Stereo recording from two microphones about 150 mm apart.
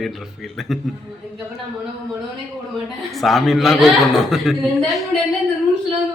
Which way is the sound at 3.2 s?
Centre (ahead or behind).